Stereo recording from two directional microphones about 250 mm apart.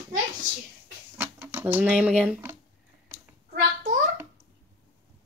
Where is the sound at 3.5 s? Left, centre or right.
Right.